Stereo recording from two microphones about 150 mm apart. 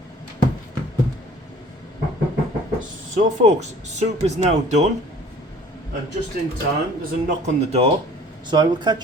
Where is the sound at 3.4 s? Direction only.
50° right (ahead or behind).